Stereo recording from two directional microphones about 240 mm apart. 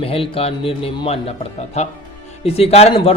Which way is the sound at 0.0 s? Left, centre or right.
Left.